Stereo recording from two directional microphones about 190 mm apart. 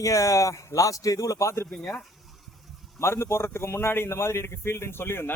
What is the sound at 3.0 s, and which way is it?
A man's voice, 15° left (ahead or behind).